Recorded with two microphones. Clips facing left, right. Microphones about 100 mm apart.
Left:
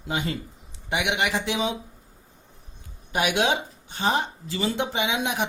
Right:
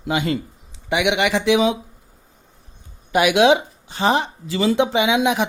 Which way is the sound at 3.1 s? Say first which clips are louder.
Right 9 dB; 90° right.